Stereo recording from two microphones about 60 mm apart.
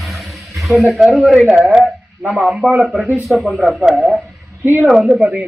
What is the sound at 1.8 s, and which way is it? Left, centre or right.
Speech, centre.